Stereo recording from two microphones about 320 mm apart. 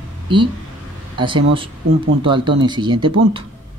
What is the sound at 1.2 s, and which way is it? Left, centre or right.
Speech, centre.